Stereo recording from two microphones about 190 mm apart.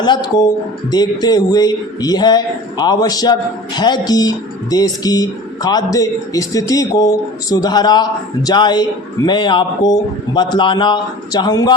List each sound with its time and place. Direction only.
0.3 s speech: 20° left (ahead or behind)